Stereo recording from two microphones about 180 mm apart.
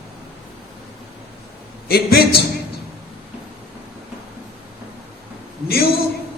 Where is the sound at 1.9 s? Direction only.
60° left (ahead or behind).